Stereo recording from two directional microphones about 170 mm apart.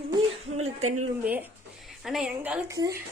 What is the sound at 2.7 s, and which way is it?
Speech, 20° right (ahead or behind).